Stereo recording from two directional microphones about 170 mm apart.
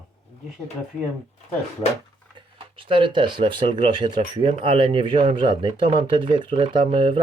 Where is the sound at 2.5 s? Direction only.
30° right (ahead or behind).